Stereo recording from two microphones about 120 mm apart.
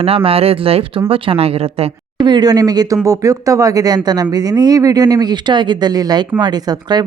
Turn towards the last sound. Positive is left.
turn(degrees=-35)  # may be behind; listen again after turning